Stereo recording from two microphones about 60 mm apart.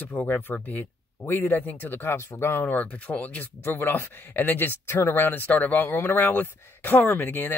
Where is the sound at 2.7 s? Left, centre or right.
Left.